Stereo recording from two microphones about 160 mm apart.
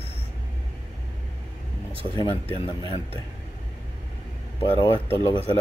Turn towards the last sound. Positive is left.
turn(degrees=35)  # may be behind; listen again after turning